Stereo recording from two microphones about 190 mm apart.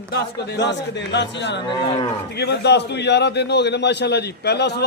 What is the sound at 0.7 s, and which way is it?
A man's voice, 65° left (ahead or behind).